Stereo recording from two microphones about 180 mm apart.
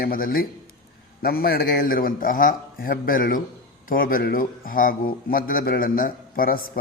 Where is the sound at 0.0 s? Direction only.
55° left (ahead or behind).